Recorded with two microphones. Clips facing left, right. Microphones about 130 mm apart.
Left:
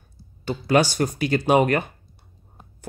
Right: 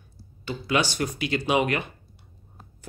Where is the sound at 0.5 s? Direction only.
40° left (ahead or behind).